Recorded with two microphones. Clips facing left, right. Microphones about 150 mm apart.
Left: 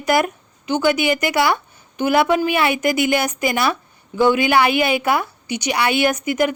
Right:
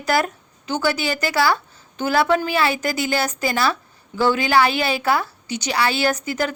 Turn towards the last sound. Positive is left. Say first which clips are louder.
# left 4 dB
turn(degrees=15)  # may be behind; listen again after turning